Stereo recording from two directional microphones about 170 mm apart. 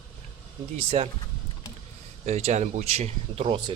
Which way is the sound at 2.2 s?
40° right (ahead or behind).